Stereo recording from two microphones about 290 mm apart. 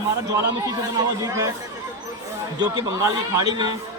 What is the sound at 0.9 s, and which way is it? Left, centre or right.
Speech, centre.